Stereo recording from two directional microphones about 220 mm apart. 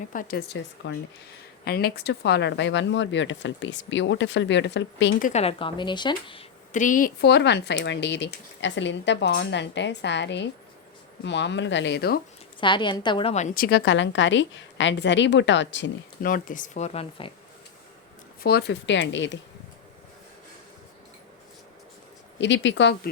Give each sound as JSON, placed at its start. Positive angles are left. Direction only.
{"t": 0.1, "sound": "speech", "side_deg": 40}
{"t": 5.2, "sound": "speech", "side_deg": 30}
{"t": 6.7, "sound": "speech", "side_deg": 35}
{"t": 12.5, "sound": "speech", "side_deg": 20}
{"t": 16.2, "sound": "speech", "side_deg": 40}
{"t": 18.4, "sound": "speech", "side_deg": 50}
{"t": 22.4, "sound": "speech", "side_deg": 55}